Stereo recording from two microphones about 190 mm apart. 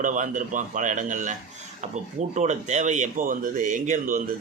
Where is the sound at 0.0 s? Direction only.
40° right (ahead or behind).